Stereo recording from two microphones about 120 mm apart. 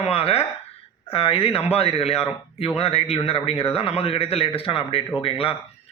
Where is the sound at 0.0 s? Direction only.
55° left (ahead or behind).